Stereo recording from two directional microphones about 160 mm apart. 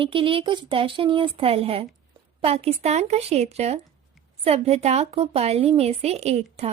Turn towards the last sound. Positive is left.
turn(degrees=-40)  # may be behind; listen again after turning